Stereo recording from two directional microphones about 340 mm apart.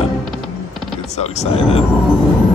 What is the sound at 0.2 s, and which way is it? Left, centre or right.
Music, centre.